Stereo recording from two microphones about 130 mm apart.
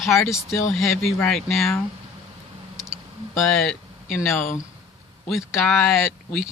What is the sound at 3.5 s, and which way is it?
Speech, 5° left (ahead or behind).